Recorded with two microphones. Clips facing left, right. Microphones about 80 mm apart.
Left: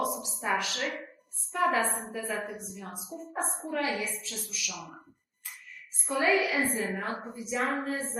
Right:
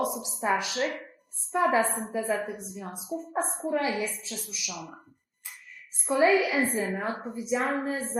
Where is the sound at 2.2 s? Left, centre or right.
Right.